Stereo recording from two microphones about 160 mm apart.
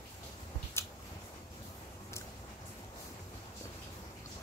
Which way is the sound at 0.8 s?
15° left (ahead or behind).